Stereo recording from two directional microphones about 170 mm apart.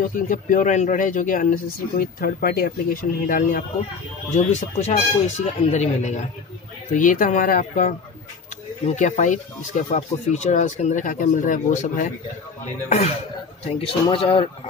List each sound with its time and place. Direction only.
0.0 s speech: 50° left (ahead or behind); by 14.5 s 30° left (ahead or behind)